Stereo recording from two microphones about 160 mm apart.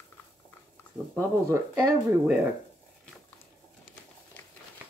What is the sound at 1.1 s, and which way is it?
Speech, 15° right (ahead or behind).